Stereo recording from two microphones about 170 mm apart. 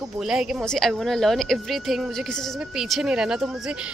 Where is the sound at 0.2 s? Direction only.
5° right (ahead or behind).